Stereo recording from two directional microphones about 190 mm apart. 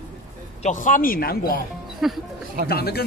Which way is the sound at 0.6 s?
40° left (ahead or behind).